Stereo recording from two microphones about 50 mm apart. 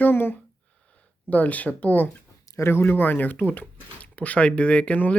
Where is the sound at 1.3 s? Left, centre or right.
Left.